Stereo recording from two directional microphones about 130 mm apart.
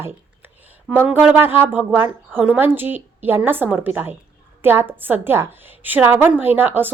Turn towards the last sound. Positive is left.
turn(degrees=-15)  # may be behind; listen again after turning